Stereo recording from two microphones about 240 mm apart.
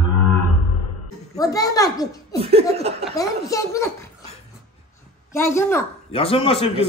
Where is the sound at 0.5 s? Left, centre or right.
Right.